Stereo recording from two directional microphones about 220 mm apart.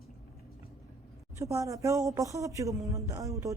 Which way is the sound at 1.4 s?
15° right (ahead or behind).